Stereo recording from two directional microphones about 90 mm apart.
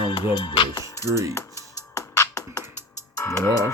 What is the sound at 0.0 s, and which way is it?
Music, 70° left (ahead or behind).